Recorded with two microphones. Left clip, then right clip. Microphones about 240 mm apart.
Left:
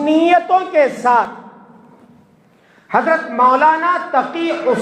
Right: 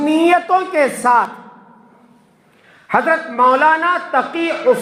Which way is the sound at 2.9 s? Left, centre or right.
Right.